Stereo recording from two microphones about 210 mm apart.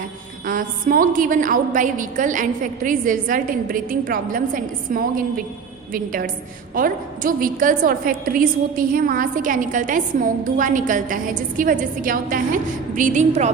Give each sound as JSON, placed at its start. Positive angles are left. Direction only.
{"t": 0.4, "sound": "a woman's voice", "side_deg": -40}